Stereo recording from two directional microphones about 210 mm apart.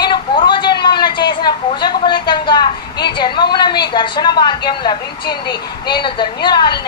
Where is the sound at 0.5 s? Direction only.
20° left (ahead or behind).